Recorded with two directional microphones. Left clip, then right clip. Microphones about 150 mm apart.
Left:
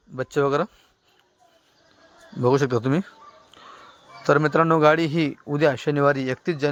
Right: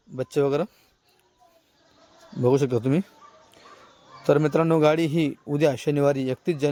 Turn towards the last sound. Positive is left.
turn(degrees=-15)  # may be behind; listen again after turning